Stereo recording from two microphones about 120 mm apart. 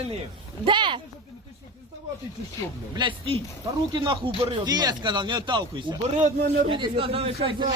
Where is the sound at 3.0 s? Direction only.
45° right (ahead or behind).